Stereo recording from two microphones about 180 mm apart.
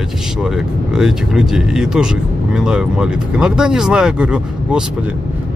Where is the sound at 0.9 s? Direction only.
5° right (ahead or behind).